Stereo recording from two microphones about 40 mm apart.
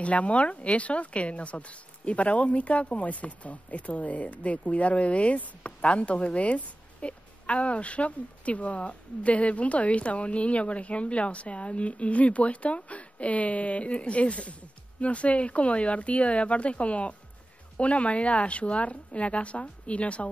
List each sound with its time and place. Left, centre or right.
0.0 s speech: left